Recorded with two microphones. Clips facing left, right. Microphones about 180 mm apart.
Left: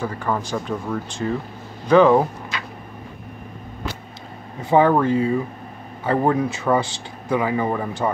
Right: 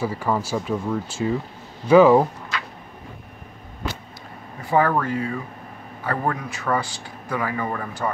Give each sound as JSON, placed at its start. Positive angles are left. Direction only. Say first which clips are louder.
{"t": 0.0, "sound": "speech", "louder": "right 1 dB", "side_deg": -10}
{"t": 4.6, "sound": "speech", "louder": "left 4 dB", "side_deg": 20}